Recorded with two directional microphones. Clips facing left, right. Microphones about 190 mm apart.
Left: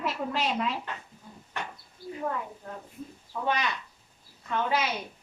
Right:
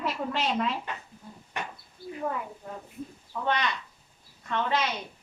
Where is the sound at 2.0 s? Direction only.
55° right (ahead or behind).